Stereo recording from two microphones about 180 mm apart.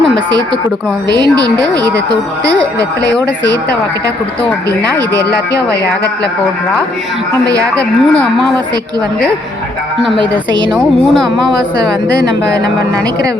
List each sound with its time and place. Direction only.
1.1 s speech: 20° right (ahead or behind)
4.8 s speech: 20° right (ahead or behind)
10.7 s a woman's voice: centre (ahead or behind)